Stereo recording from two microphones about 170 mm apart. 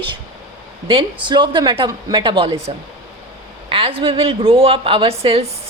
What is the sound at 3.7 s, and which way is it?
A woman's voice, 35° right (ahead or behind).